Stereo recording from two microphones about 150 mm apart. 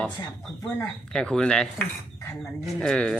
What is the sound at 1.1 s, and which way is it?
Speech, 5° left (ahead or behind).